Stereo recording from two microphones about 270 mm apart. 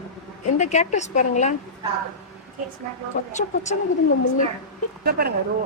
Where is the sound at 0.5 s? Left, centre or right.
Left.